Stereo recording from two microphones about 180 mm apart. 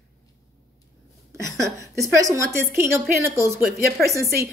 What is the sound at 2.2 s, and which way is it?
A woman's voice, 20° right (ahead or behind).